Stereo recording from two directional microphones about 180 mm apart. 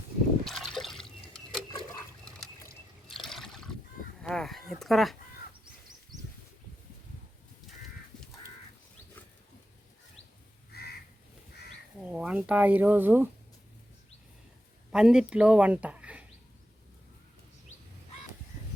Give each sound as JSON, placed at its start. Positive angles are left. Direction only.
{"t": 0.4, "sound": "liquid", "side_deg": 0}
{"t": 3.1, "sound": "trickle", "side_deg": 0}
{"t": 4.2, "sound": "a sound", "side_deg": 0}
{"t": 10.7, "sound": "crow", "side_deg": 60}
{"t": 12.0, "sound": "speech", "side_deg": -5}
{"t": 14.9, "sound": "speech", "side_deg": -5}